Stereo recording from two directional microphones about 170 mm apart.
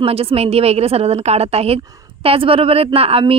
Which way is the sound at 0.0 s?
35° right (ahead or behind).